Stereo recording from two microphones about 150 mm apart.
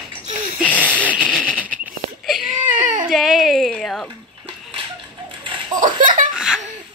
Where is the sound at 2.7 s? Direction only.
60° right (ahead or behind).